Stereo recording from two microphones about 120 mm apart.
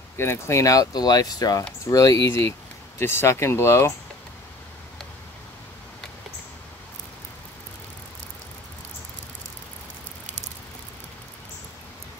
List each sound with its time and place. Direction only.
0.2 s speech: 20° left (ahead or behind)